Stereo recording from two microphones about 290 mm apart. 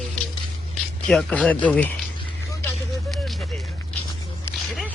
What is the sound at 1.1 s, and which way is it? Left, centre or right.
Speech, centre.